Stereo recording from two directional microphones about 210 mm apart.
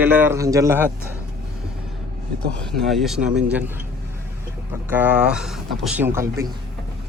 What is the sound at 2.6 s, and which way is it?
A man's voice, centre (ahead or behind).